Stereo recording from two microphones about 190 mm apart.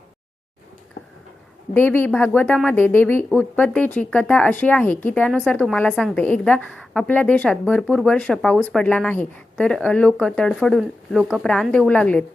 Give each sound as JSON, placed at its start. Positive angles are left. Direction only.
{"t": 1.7, "sound": "speech", "side_deg": 10}